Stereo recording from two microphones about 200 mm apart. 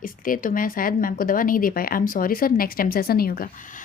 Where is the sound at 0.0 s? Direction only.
45° left (ahead or behind).